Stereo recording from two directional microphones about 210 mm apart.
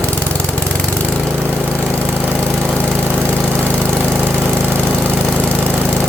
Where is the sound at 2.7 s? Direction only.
10° left (ahead or behind).